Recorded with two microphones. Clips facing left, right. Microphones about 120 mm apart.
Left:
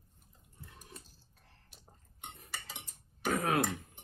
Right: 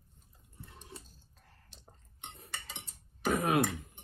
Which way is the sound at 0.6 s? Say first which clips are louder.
Right 2 dB; 25° right (ahead or behind).